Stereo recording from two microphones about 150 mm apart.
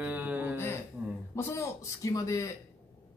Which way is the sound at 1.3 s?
20° left (ahead or behind).